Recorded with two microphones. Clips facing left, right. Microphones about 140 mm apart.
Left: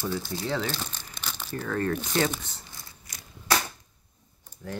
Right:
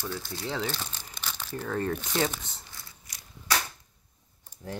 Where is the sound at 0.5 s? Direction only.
10° right (ahead or behind).